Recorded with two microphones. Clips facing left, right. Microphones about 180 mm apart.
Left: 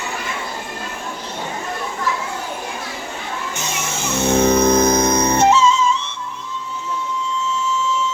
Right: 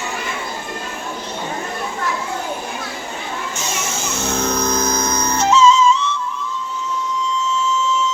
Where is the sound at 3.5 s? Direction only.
60° left (ahead or behind).